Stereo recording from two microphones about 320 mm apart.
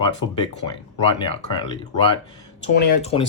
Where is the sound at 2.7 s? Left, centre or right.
Left.